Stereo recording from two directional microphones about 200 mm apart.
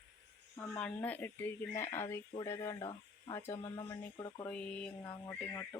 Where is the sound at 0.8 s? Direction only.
5° left (ahead or behind).